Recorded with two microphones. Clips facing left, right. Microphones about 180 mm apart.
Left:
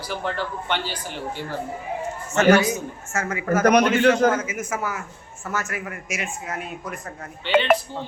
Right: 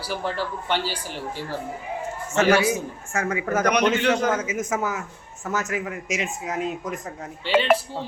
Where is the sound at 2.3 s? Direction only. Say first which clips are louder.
Left 2 dB; 5° right (ahead or behind).